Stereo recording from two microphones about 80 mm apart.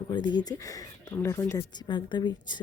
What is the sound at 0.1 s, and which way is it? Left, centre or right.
Speech, left.